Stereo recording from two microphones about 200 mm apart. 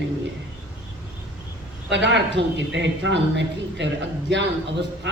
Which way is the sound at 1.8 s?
60° right (ahead or behind).